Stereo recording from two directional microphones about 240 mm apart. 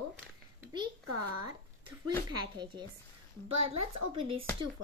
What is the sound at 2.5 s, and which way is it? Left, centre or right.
Speech, centre.